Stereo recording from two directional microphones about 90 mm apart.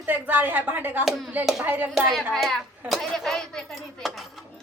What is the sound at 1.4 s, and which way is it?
Speech, 5° right (ahead or behind).